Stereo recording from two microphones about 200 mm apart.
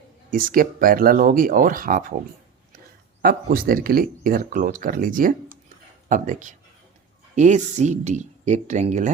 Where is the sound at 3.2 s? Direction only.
50° right (ahead or behind).